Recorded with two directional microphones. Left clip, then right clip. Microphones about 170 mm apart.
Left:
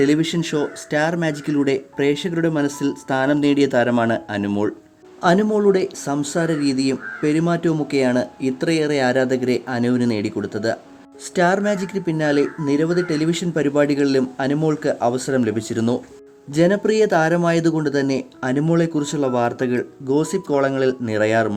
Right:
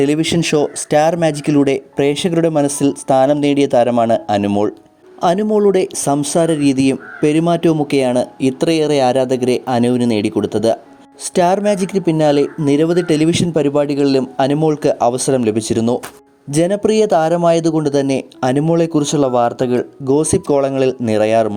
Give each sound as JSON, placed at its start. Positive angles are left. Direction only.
{"t": 0.0, "sound": "speech", "side_deg": -40}